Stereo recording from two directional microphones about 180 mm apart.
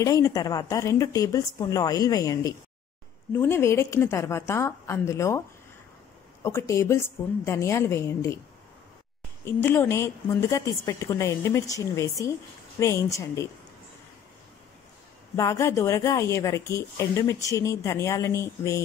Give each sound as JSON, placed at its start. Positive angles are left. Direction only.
{"t": 0.0, "sound": "a woman's voice", "side_deg": 20}
{"t": 6.4, "sound": "a woman's voice", "side_deg": 15}
{"t": 9.4, "sound": "a woman's voice", "side_deg": 15}
{"t": 15.3, "sound": "a woman's voice", "side_deg": 15}